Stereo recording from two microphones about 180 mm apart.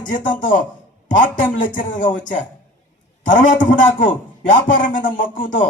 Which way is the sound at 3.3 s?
45° left (ahead or behind).